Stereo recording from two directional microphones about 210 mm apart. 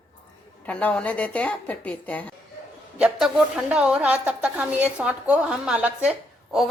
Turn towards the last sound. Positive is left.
turn(degrees=-5)  # may be behind; listen again after turning